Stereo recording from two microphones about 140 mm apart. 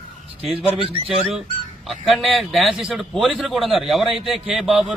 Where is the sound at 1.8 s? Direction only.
Centre (ahead or behind).